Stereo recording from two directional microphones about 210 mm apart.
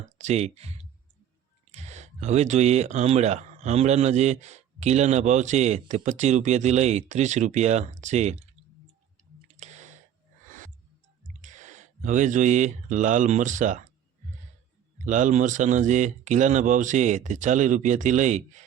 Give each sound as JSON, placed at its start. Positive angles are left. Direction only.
{"t": 0.0, "sound": "speech", "side_deg": -35}
{"t": 9.6, "sound": "a sound", "side_deg": -35}
{"t": 11.3, "sound": "speech", "side_deg": -35}
{"t": 15.0, "sound": "speech", "side_deg": -35}